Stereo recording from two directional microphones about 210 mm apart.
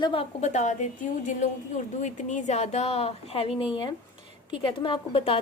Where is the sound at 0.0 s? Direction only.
25° left (ahead or behind).